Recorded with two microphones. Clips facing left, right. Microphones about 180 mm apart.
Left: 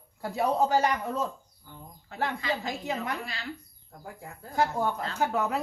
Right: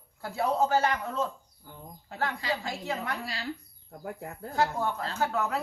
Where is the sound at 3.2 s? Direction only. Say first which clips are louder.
Right 1 dB; 35° right (ahead or behind).